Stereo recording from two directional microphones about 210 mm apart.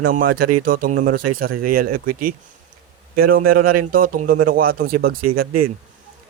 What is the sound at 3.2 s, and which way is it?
Speech, 45° right (ahead or behind).